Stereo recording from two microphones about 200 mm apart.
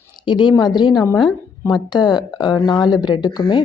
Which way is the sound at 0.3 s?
25° left (ahead or behind).